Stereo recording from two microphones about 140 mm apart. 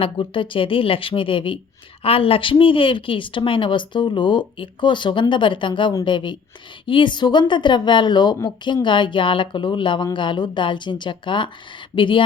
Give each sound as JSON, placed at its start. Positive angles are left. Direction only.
{"t": 0.0, "sound": "speech", "side_deg": 35}